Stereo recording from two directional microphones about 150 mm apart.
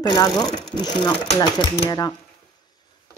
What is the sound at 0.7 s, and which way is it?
Speech, 30° left (ahead or behind).